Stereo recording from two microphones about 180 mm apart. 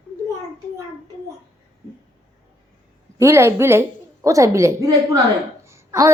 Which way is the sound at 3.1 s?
15° right (ahead or behind).